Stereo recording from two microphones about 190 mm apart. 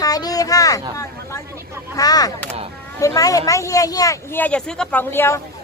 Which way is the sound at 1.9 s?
20° left (ahead or behind).